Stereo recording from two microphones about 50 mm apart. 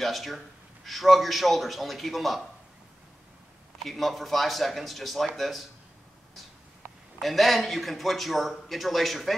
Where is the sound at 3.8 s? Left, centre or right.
Centre.